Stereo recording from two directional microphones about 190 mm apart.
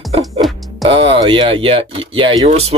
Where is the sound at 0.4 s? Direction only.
Centre (ahead or behind).